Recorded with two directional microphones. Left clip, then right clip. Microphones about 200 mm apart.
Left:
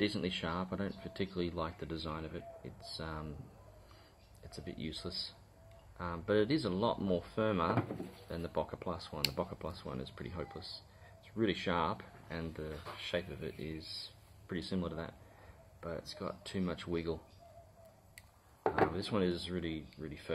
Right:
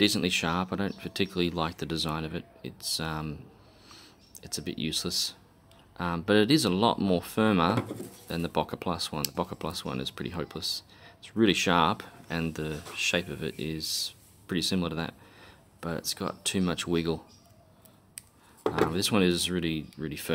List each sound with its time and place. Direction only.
0.0 s speech: 45° right (ahead or behind)
4.4 s speech: 45° right (ahead or behind)
18.9 s speech: 50° right (ahead or behind)